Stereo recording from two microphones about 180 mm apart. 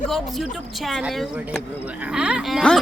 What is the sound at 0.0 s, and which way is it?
Speech, centre (ahead or behind).